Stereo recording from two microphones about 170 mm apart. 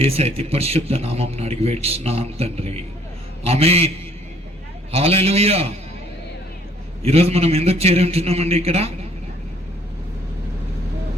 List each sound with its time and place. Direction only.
0.0 s speech: 35° right (ahead or behind)
7.0 s speech: 35° right (ahead or behind)